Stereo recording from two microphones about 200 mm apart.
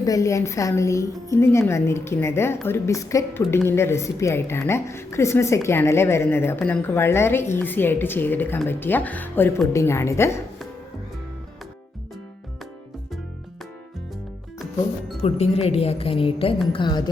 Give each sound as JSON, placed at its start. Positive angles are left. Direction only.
{"t": 0.0, "sound": "a woman's voice", "side_deg": 15}
{"t": 15.2, "sound": "speech", "side_deg": 30}